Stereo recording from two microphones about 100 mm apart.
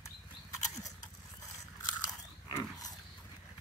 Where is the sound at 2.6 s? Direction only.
40° left (ahead or behind).